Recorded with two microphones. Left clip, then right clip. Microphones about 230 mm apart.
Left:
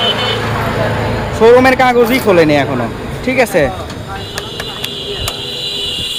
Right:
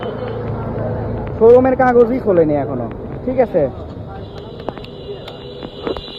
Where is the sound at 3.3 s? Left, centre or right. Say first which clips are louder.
Left 3 dB; left.